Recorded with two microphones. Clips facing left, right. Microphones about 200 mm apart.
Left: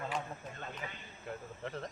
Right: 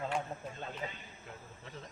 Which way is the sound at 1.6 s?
65° left (ahead or behind).